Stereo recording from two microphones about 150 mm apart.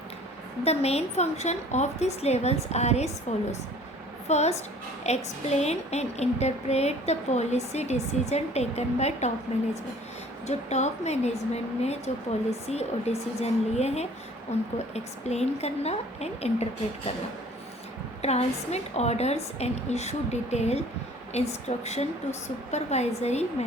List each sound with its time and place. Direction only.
0.6 s a woman's voice: 45° left (ahead or behind)
4.3 s a woman's voice: 50° left (ahead or behind)
10.4 s a woman's voice: 45° left (ahead or behind)
18.2 s a woman's voice: 45° left (ahead or behind)